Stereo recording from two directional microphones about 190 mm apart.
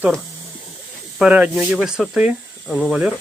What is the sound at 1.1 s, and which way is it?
Speech, 5° right (ahead or behind).